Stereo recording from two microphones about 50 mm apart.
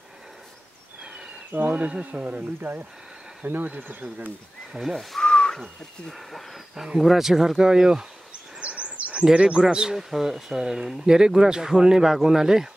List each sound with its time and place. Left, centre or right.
1.5 s speech: right
3.7 s speech: right
4.9 s speech: centre
5.3 s a sound: centre
6.1 s speech: centre
8.5 s a sound: right
9.2 s speech: centre